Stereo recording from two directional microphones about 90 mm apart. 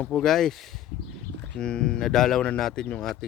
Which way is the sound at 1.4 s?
10° left (ahead or behind).